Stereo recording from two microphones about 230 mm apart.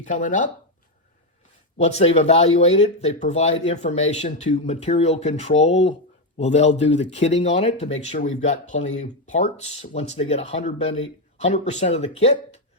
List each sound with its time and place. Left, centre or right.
0.0 s speech: left
1.8 s speech: left